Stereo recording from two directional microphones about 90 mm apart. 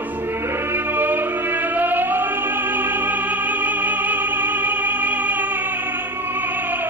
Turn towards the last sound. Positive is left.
turn(degrees=-20)  # may be behind; listen again after turning